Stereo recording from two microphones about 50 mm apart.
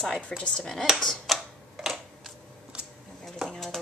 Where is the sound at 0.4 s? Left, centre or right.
Centre.